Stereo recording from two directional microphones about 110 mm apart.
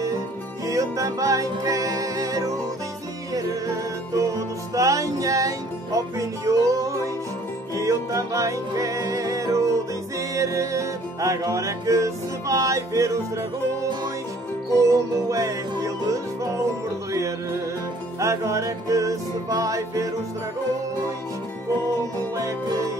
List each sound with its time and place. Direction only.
0.7 s music: 30° right (ahead or behind)
4.7 s music: 30° right (ahead or behind)
22.3 s music: 30° right (ahead or behind)